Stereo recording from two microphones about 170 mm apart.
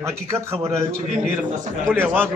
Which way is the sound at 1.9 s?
10° right (ahead or behind).